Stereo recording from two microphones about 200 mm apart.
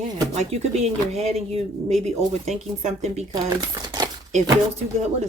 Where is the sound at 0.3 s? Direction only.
30° right (ahead or behind).